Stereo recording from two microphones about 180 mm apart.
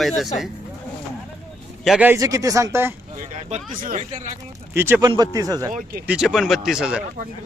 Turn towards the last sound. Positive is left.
turn(degrees=-5)  # may be behind; listen again after turning